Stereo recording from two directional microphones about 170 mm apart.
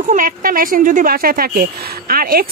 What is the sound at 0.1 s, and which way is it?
Speech, 55° right (ahead or behind).